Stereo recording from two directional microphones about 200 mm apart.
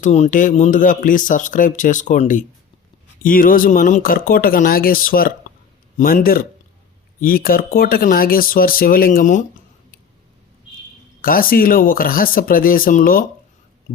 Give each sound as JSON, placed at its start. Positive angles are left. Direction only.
{"t": 0.0, "sound": "speech", "side_deg": 35}
{"t": 11.2, "sound": "speech", "side_deg": 45}